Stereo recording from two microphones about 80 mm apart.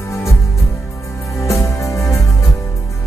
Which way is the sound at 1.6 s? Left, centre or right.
Left.